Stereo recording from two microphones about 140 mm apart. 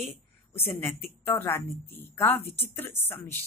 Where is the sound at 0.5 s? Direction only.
15° left (ahead or behind).